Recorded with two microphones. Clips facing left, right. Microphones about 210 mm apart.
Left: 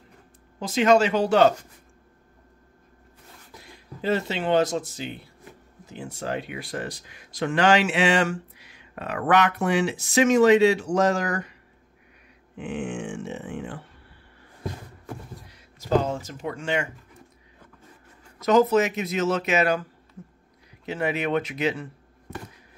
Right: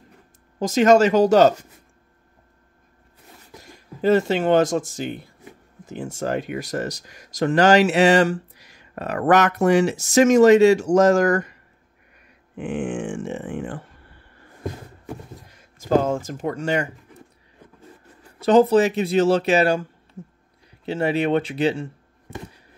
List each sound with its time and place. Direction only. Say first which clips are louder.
0.6 s speech: right 4 dB; 45° right (ahead or behind)
3.6 s speech: right 7 dB; 45° right (ahead or behind)
12.5 s speech: right 5 dB; 50° right (ahead or behind)
15.5 s speech: right 4 dB; 50° right (ahead or behind)
18.4 s speech: right 4 dB; 30° right (ahead or behind)
20.2 s a sound: right 5 dB; 25° right (ahead or behind)
20.8 s speech: right 5 dB; 30° right (ahead or behind)